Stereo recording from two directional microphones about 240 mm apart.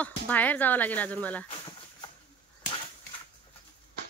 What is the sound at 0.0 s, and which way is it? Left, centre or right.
Speech, centre.